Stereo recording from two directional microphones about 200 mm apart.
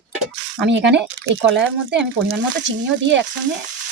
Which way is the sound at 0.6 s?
60° right (ahead or behind).